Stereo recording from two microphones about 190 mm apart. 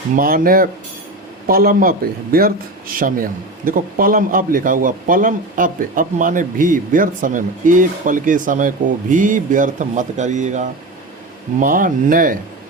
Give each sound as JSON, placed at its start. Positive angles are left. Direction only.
{"t": 0.2, "sound": "a man's voice", "side_deg": -50}